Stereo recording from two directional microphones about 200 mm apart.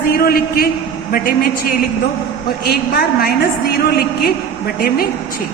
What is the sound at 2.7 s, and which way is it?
A woman's voice, 50° left (ahead or behind).